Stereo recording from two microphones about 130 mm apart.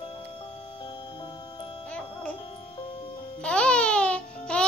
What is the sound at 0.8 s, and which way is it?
Music, 40° left (ahead or behind).